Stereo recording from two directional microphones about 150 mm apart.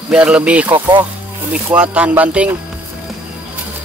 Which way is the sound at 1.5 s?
10° right (ahead or behind).